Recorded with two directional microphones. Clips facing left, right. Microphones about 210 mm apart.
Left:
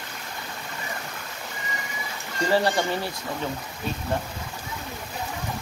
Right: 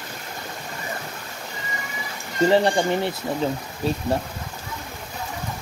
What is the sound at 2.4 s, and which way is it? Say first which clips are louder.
Speech: right 5 dB; 20° right (ahead or behind).